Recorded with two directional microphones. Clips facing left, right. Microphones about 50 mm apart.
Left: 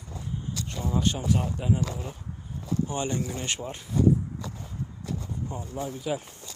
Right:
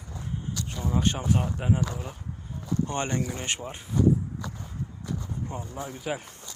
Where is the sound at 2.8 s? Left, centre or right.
Right.